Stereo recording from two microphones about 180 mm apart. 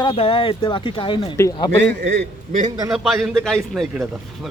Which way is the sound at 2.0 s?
40° right (ahead or behind).